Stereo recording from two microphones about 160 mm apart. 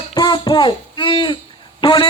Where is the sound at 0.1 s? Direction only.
25° left (ahead or behind).